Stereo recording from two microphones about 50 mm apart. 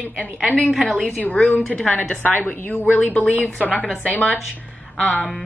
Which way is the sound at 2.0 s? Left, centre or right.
Left.